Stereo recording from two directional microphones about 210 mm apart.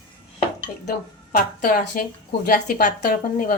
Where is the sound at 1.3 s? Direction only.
40° left (ahead or behind).